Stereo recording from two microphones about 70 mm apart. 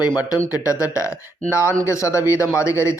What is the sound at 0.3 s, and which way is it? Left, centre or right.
Speech, left.